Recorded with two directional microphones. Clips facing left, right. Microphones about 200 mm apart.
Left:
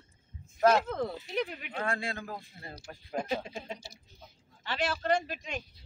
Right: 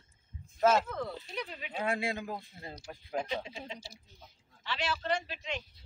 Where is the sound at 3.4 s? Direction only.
50° left (ahead or behind).